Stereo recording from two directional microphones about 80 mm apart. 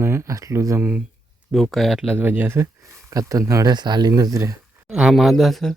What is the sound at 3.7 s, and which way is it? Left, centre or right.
Speech, right.